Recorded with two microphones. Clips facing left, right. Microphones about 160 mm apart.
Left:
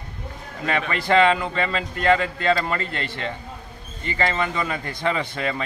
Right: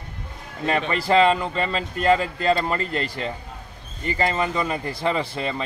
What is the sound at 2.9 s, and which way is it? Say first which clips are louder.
Speech: right 3 dB; 35° right (ahead or behind).